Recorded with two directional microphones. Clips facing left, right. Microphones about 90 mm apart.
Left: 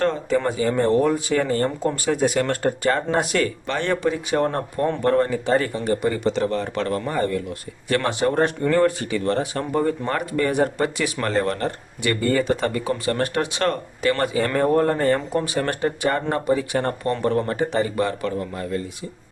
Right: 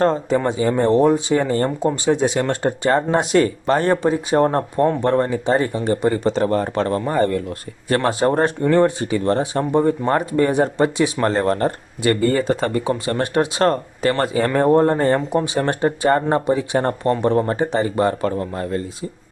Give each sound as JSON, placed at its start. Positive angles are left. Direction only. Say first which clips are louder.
{"t": 0.0, "sound": "speech", "louder": "right 3 dB", "side_deg": -35}
{"t": 7.9, "sound": "speech", "louder": "right 4 dB", "side_deg": -35}